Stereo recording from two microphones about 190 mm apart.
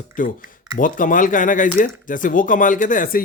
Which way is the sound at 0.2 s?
45° left (ahead or behind).